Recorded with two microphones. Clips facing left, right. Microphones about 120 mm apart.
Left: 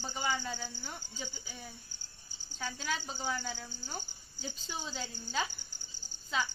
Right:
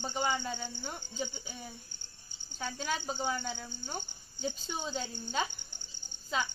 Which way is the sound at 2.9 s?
45° right (ahead or behind).